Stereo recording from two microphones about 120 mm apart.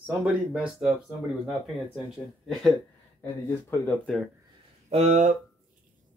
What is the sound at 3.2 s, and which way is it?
Speech, 20° left (ahead or behind).